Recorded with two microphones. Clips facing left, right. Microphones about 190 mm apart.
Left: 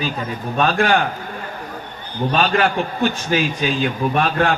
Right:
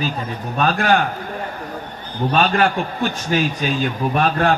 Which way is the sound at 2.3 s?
40° right (ahead or behind).